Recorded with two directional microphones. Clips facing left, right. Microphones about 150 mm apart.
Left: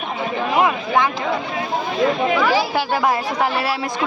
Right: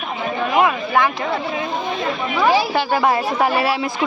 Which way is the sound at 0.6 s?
20° left (ahead or behind).